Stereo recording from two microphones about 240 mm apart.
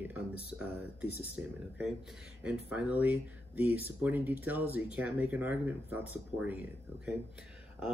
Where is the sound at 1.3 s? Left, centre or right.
Centre.